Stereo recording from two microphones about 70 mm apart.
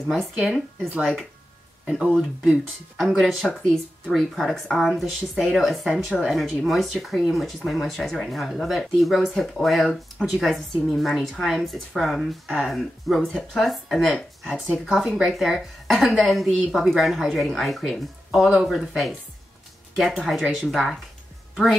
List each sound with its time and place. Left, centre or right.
0.1 s speech: centre
1.9 s speech: centre
3.0 s speech: centre